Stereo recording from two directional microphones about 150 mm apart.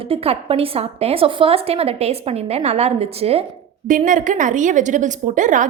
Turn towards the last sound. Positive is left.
turn(degrees=-60)  # may be behind; listen again after turning